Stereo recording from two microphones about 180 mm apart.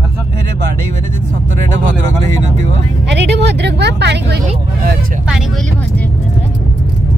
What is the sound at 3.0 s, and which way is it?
Vehicle, 70° right (ahead or behind).